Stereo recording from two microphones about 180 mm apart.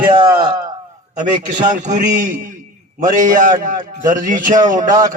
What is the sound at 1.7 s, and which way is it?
A man's voice, 45° right (ahead or behind).